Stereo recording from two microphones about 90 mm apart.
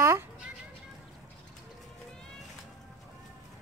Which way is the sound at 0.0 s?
30° right (ahead or behind).